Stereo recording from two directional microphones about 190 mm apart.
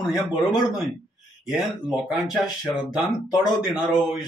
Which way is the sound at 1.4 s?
5° right (ahead or behind).